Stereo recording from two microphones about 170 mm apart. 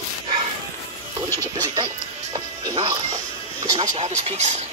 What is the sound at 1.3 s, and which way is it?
Music, 20° right (ahead or behind).